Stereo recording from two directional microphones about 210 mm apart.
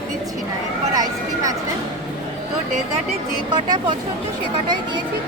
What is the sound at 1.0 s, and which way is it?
Speech, 15° right (ahead or behind).